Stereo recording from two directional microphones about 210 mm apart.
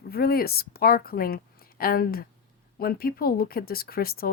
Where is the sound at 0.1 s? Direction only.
45° left (ahead or behind).